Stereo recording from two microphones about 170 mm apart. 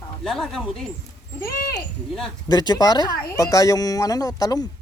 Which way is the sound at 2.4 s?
25° left (ahead or behind).